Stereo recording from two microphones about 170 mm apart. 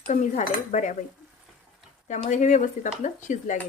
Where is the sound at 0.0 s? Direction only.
45° left (ahead or behind).